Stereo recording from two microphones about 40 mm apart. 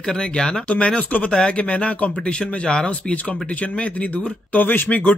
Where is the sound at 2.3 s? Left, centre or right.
Left.